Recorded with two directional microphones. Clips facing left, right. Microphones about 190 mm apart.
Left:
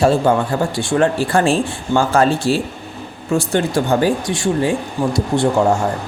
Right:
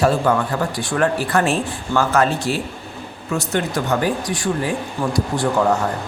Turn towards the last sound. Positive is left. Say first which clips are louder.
# left 3 dB
turn(degrees=25)  # may be behind; listen again after turning